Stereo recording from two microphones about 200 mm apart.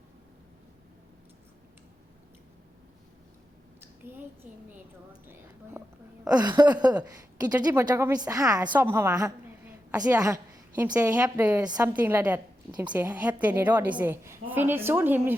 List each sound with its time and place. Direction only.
3.8 s a woman's voice: 10° right (ahead or behind)